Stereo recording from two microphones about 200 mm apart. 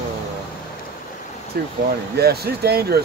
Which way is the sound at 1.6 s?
50° right (ahead or behind).